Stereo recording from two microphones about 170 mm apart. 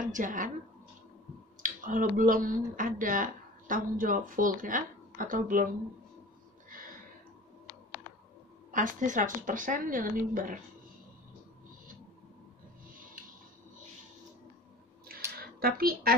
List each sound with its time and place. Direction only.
0.0 s a woman's voice: 50° right (ahead or behind)
1.6 s speech: 50° right (ahead or behind)
6.7 s a sound: 55° right (ahead or behind)
8.7 s a woman's voice: 50° right (ahead or behind)
15.3 s speech: 60° right (ahead or behind)